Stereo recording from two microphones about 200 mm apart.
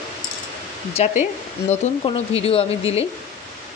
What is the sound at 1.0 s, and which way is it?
A woman's voice, 30° left (ahead or behind).